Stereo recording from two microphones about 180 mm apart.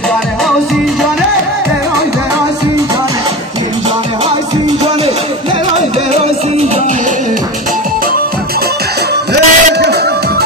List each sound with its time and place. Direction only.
9.3 s music: 65° right (ahead or behind)